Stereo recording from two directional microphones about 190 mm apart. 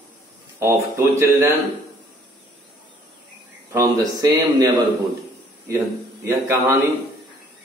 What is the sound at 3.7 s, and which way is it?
A man's voice, 15° right (ahead or behind).